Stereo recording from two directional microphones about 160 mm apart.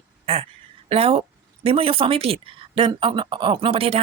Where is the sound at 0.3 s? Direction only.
35° right (ahead or behind).